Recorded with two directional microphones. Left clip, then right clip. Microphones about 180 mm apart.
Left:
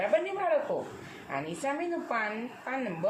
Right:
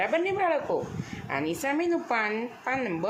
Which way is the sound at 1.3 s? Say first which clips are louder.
Right 4 dB; 45° right (ahead or behind).